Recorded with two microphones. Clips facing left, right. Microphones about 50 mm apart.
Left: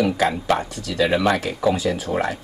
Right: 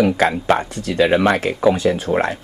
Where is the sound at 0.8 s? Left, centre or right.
Right.